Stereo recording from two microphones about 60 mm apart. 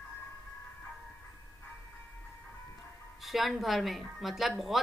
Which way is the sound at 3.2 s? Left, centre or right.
Centre.